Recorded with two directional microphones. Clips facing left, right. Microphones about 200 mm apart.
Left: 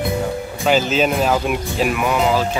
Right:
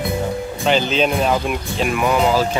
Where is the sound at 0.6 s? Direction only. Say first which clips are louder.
Left 1 dB; 5° left (ahead or behind).